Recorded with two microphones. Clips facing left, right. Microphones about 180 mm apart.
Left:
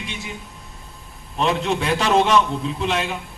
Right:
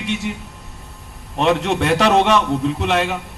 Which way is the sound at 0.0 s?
70° right (ahead or behind).